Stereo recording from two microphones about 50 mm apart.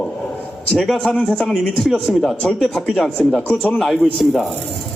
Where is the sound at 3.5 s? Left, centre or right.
Left.